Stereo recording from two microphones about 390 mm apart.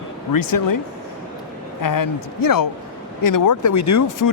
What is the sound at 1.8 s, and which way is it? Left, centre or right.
Speech, left.